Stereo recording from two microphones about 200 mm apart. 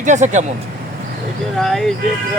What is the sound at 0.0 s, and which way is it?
Speech, 40° right (ahead or behind).